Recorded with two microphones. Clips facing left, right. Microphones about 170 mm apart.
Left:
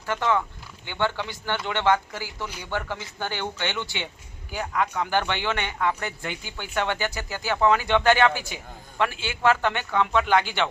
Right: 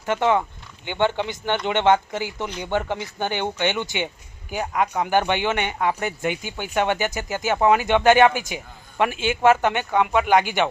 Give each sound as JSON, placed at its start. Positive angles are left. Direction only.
{"t": 0.0, "sound": "speech", "side_deg": -20}